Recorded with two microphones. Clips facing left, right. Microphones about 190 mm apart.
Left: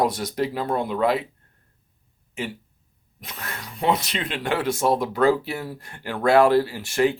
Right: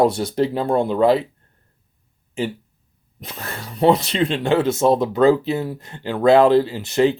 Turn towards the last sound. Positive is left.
turn(degrees=-20)  # may be behind; listen again after turning